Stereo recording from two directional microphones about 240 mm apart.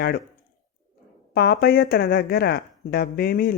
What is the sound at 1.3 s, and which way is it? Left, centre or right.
Speech, left.